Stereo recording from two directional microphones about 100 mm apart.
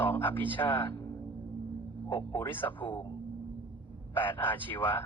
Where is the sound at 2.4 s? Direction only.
20° left (ahead or behind).